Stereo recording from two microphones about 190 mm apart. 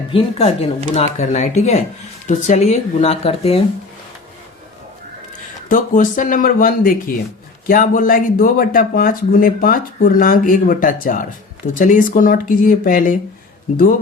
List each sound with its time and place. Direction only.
0.1 s speech: 30° left (ahead or behind)
5.6 s speech: 45° left (ahead or behind)